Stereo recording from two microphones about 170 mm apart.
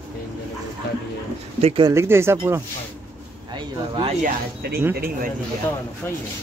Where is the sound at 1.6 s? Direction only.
35° right (ahead or behind).